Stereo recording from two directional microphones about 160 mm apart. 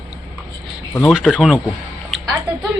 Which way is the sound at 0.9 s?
10° left (ahead or behind).